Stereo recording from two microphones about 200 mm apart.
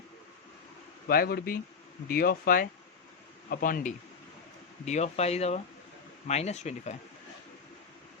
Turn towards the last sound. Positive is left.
turn(degrees=35)  # may be behind; listen again after turning